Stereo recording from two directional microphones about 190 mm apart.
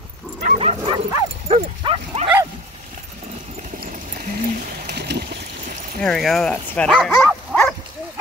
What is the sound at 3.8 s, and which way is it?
Clip-clop, 50° right (ahead or behind).